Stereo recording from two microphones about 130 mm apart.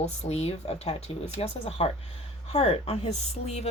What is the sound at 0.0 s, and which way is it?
Speech, 55° left (ahead or behind).